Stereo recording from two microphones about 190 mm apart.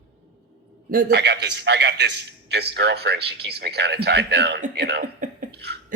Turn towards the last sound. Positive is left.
turn(degrees=-60)  # may be behind; listen again after turning